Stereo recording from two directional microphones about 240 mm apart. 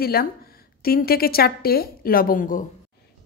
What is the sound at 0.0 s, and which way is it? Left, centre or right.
A woman's voice, left.